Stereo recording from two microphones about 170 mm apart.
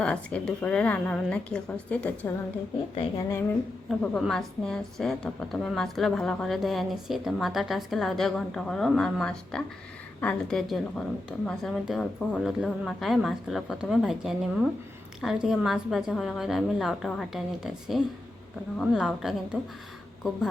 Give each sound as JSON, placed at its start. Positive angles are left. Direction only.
{"t": 0.0, "sound": "a woman's voice", "side_deg": 5}
{"t": 3.8, "sound": "a woman's voice", "side_deg": 0}